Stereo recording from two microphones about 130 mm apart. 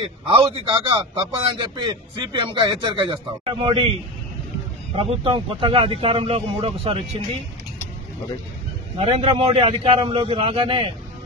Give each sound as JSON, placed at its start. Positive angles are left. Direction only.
{"t": 0.3, "sound": "speech", "side_deg": -40}
{"t": 4.9, "sound": "speech", "side_deg": -45}
{"t": 8.9, "sound": "speech", "side_deg": -50}